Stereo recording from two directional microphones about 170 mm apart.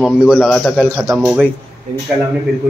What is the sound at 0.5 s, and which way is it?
Speech, 5° left (ahead or behind).